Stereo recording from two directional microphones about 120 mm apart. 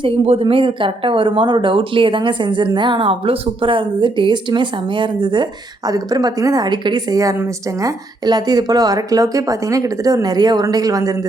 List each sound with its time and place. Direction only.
0.0 s a woman's voice: 45° right (ahead or behind); by 11.1 s 30° right (ahead or behind)